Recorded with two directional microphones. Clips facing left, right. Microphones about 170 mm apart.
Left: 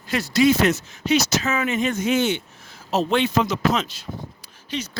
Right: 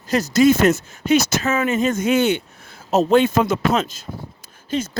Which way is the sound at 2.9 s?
45° right (ahead or behind).